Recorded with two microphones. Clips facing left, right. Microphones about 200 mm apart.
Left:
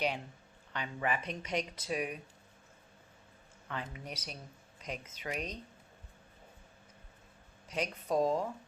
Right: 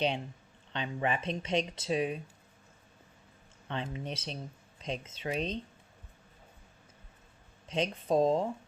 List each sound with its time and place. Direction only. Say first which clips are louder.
0.7 s speech: right 3 dB; 25° right (ahead or behind)
3.7 s speech: right 5 dB; 25° right (ahead or behind)
7.7 s speech: right 4 dB; 25° right (ahead or behind)